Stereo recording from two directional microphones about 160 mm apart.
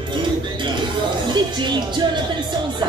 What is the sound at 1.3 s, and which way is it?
Music, 30° right (ahead or behind).